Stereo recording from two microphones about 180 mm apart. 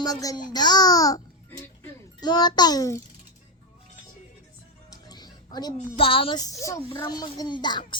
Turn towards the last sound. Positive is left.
turn(degrees=25)  # may be behind; listen again after turning